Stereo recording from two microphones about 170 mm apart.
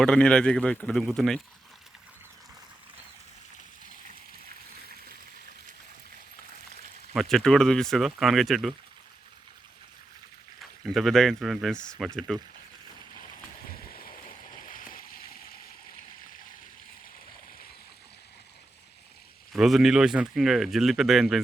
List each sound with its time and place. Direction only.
0.0 s speech: 5° left (ahead or behind)
7.1 s speech: centre (ahead or behind)
10.8 s speech: centre (ahead or behind)
14.6 s a sound: 55° left (ahead or behind)
19.5 s speech: centre (ahead or behind)